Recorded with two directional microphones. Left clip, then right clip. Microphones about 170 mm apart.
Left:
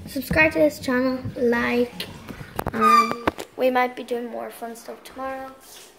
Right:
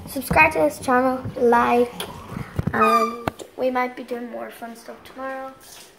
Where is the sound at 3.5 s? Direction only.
35° left (ahead or behind).